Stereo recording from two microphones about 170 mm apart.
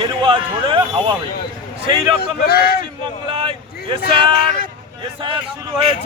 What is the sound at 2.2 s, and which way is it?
Speech, 65° left (ahead or behind).